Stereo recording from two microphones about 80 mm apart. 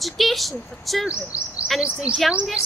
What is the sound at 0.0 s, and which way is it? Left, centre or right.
Speech, centre.